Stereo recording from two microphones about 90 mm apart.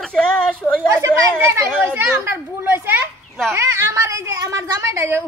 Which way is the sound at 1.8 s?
25° right (ahead or behind).